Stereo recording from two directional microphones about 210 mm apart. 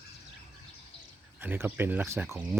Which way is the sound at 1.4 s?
10° right (ahead or behind).